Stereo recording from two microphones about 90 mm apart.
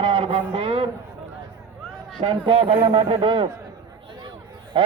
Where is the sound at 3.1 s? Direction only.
70° right (ahead or behind).